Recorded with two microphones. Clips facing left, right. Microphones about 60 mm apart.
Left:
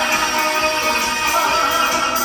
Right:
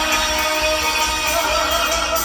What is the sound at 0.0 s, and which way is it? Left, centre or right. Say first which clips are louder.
Music: left 2 dB; left.